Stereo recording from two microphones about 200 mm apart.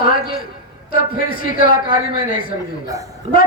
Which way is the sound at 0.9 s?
45° left (ahead or behind).